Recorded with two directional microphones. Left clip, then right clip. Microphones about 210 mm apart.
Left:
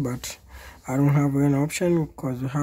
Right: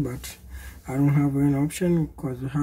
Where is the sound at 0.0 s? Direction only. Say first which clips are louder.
Left 2 dB; 55° left (ahead or behind).